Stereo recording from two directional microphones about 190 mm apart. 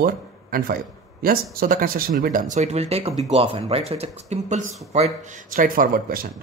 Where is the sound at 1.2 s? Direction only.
50° right (ahead or behind).